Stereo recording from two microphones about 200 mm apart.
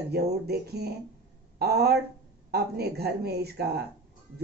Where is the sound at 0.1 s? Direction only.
55° right (ahead or behind).